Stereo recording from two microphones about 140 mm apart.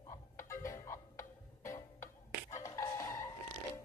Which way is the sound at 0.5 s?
20° left (ahead or behind).